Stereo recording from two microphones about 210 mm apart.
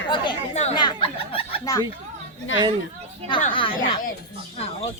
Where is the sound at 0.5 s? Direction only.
25° left (ahead or behind).